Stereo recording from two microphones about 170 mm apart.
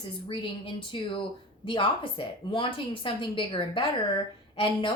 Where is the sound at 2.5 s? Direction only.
30° left (ahead or behind).